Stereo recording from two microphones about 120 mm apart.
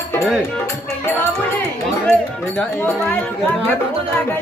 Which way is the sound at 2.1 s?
5° left (ahead or behind).